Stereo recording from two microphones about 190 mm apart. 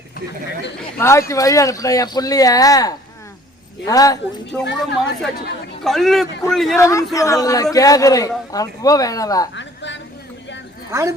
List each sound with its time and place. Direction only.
0.9 s a man's voice: 15° left (ahead or behind)
4.6 s speech: 65° left (ahead or behind)
5.8 s a man's voice: centre (ahead or behind)
6.7 s a man's voice: 15° left (ahead or behind)
9.6 s a sound: 70° left (ahead or behind)